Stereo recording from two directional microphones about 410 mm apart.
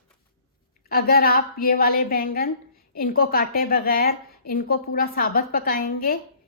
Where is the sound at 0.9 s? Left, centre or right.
Left.